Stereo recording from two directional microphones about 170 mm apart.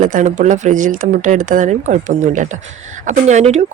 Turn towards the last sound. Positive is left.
turn(degrees=-45)  # may be behind; listen again after turning